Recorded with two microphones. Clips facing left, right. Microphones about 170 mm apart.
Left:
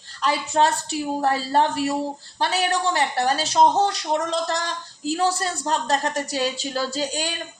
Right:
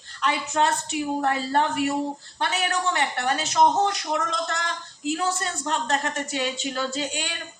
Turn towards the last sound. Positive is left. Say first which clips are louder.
# left 3 dB
turn(degrees=35)  # may be behind; listen again after turning